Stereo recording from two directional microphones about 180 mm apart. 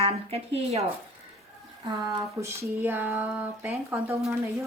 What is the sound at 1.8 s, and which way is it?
Speech, 15° right (ahead or behind).